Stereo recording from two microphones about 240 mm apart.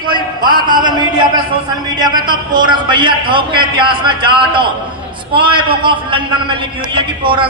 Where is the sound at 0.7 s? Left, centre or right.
Centre.